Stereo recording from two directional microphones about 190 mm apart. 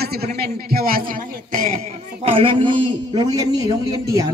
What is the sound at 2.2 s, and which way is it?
A man's voice, 30° right (ahead or behind).